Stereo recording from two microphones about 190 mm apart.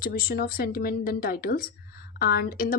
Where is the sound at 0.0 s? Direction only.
50° left (ahead or behind).